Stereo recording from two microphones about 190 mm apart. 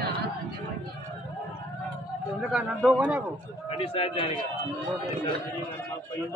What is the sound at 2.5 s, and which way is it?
Speech, 5° right (ahead or behind).